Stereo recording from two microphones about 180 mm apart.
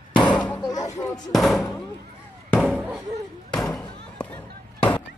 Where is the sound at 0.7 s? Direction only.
20° left (ahead or behind).